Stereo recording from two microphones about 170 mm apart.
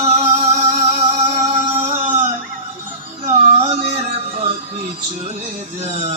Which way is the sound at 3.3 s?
40° right (ahead or behind).